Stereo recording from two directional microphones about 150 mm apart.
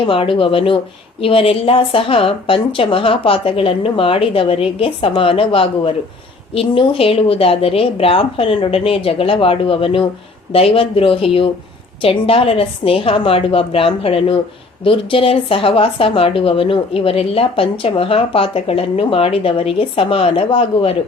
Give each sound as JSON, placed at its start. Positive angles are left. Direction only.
{"t": 0.0, "sound": "a woman's voice", "side_deg": 35}